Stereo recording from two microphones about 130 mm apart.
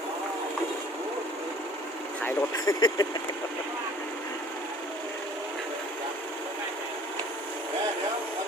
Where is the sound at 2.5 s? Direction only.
30° left (ahead or behind).